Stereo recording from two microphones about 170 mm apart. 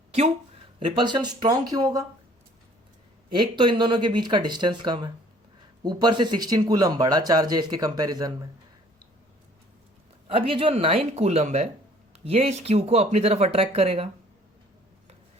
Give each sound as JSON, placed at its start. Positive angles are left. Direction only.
{"t": 0.9, "sound": "speech", "side_deg": -25}
{"t": 3.3, "sound": "speech", "side_deg": -30}
{"t": 10.2, "sound": "speech", "side_deg": -30}